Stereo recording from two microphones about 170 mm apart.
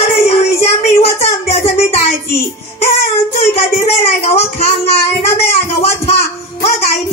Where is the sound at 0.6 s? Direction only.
35° left (ahead or behind).